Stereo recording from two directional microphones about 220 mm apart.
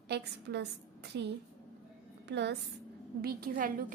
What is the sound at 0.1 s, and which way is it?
A woman's voice, 50° right (ahead or behind).